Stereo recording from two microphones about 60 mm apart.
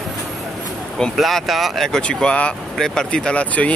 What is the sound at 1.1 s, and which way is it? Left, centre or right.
Speech, centre.